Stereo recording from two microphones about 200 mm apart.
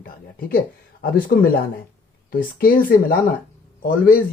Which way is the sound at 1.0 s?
50° left (ahead or behind).